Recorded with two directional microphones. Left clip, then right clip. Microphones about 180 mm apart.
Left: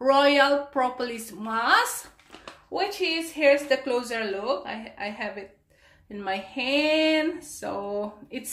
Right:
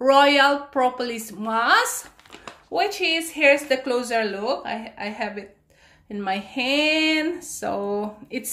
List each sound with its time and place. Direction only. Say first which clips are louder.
0.0 s a woman's voice: right 4 dB; 20° right (ahead or behind)